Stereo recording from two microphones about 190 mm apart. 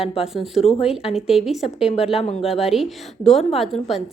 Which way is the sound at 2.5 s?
Centre (ahead or behind).